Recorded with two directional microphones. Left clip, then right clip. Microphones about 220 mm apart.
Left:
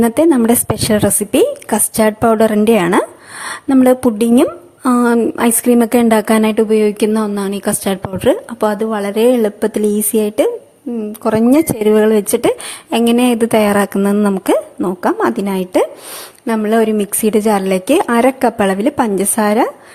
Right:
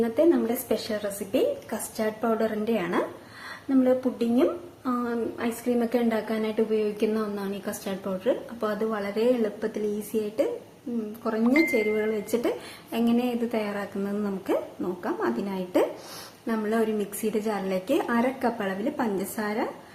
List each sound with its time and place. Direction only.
0.0 s a woman's voice: 50° left (ahead or behind)
11.9 s a woman's voice: 45° left (ahead or behind)